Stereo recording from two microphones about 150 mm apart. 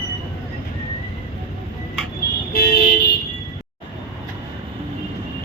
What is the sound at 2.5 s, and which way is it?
Vehicle, 90° left.